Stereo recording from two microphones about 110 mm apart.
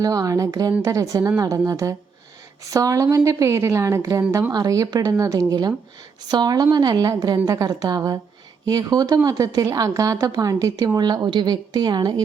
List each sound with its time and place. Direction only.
0.0 s a woman's voice: 35° right (ahead or behind)